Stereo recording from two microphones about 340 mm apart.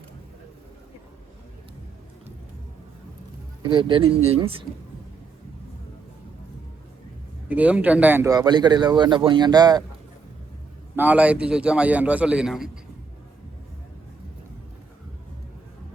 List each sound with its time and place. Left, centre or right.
3.7 s speech: centre
7.4 s speech: centre
10.9 s a man's voice: centre